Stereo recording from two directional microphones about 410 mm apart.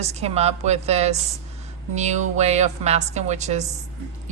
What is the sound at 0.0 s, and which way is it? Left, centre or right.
A woman's voice, centre.